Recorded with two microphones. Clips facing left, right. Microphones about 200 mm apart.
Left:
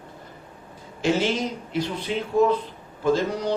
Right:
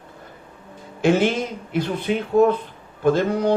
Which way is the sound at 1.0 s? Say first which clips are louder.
Right 4 dB; 55° right (ahead or behind).